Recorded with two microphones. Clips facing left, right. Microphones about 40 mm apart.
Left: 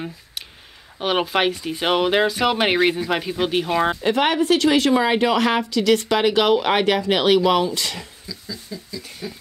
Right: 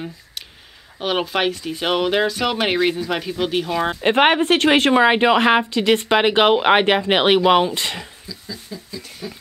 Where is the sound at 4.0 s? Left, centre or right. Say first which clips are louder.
Right 3 dB; right.